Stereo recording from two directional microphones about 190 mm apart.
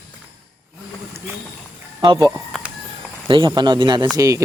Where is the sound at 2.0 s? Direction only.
20° right (ahead or behind).